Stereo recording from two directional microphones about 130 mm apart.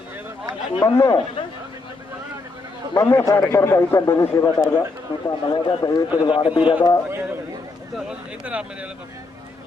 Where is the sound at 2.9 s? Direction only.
20° left (ahead or behind).